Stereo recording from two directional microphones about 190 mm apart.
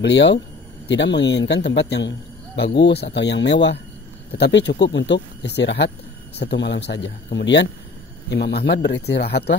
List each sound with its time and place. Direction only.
0.0 s speech: 65° left (ahead or behind)